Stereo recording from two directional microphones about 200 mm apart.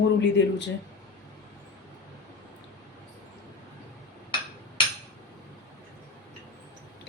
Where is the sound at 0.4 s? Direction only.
60° left (ahead or behind).